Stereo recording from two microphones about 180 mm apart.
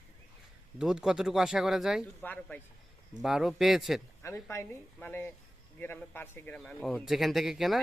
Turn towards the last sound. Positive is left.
turn(degrees=0)  # may be behind; listen again after turning